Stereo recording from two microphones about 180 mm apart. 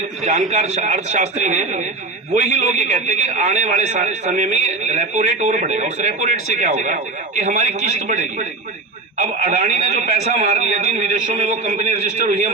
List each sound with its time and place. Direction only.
0.2 s a man's voice: 40° right (ahead or behind)